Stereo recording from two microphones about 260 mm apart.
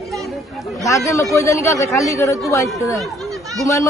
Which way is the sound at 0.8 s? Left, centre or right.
Centre.